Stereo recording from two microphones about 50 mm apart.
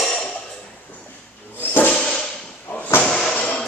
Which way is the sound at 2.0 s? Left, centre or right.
Centre.